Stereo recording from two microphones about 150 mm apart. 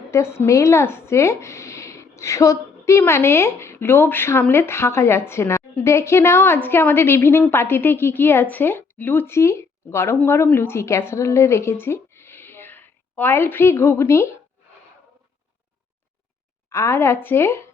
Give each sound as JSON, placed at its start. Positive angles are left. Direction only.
{"t": 0.1, "sound": "speech", "side_deg": 20}
{"t": 16.6, "sound": "speech", "side_deg": 20}